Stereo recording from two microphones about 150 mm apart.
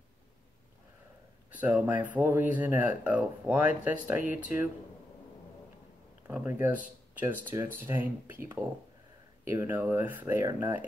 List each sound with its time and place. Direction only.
1.6 s speech: 10° right (ahead or behind)
6.2 s speech: 10° right (ahead or behind)